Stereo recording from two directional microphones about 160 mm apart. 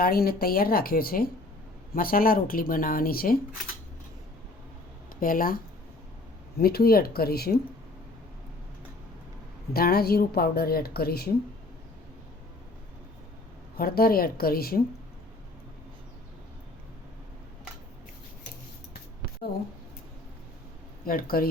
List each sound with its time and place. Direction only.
0.0 s speech: 70° left (ahead or behind)
5.2 s speech: 60° left (ahead or behind)
6.6 s speech: 75° left (ahead or behind)
9.7 s speech: 70° left (ahead or behind)
13.7 s speech: 70° left (ahead or behind)
21.0 s speech: 65° left (ahead or behind)